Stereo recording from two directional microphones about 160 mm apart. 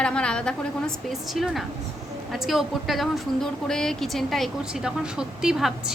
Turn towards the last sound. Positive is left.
turn(degrees=-5)  # may be behind; listen again after turning